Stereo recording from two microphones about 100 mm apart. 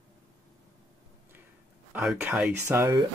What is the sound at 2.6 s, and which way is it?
Speech, 25° right (ahead or behind).